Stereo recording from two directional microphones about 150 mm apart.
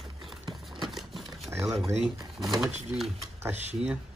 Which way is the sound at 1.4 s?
20° right (ahead or behind).